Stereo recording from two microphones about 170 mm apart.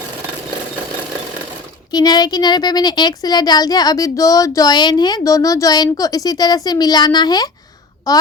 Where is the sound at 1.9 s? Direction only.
25° left (ahead or behind).